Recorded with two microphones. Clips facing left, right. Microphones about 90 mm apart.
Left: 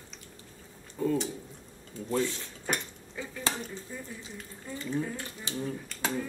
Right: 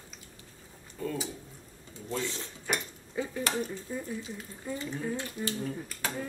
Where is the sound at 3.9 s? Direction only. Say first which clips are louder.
Right 5 dB; 15° right (ahead or behind).